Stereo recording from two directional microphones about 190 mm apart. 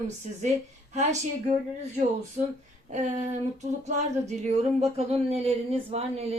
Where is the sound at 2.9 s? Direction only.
35° right (ahead or behind).